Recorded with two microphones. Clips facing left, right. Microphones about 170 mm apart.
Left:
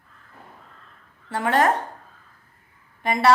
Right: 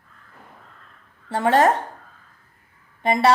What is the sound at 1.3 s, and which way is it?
Speech, 25° right (ahead or behind).